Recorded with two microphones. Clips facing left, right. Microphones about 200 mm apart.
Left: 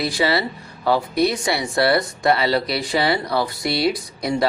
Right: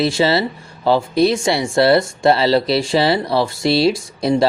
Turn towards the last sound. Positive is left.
turn(degrees=-25)  # may be behind; listen again after turning